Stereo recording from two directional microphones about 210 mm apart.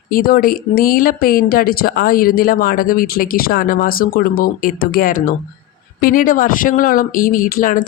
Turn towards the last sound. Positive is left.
turn(degrees=40)  # may be behind; listen again after turning